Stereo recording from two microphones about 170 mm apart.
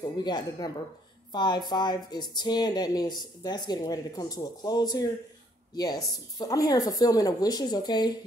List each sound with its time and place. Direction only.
0.2 s speech: 25° left (ahead or behind)